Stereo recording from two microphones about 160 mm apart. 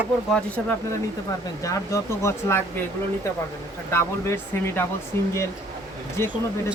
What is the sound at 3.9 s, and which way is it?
Speech, 15° left (ahead or behind).